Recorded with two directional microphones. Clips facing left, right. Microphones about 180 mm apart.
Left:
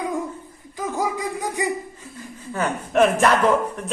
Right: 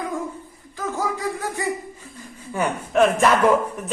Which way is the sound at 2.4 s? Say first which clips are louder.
Right 1 dB; 15° right (ahead or behind).